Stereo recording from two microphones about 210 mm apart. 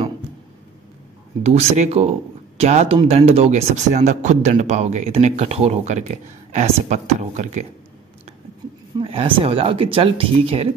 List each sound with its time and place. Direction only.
1.4 s speech: 30° right (ahead or behind)
8.9 s speech: 25° right (ahead or behind)